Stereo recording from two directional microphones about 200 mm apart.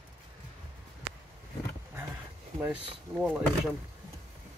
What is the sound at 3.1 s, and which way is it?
Speech, 5° right (ahead or behind).